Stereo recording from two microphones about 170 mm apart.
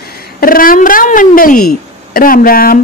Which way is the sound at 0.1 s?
60° left (ahead or behind).